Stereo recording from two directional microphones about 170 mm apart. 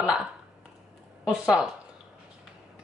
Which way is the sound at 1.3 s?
5° right (ahead or behind).